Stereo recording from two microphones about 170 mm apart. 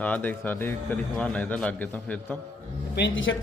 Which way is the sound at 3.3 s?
90° left.